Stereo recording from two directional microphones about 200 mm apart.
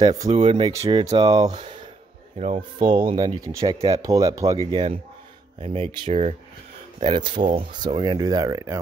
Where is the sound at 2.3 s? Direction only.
35° right (ahead or behind).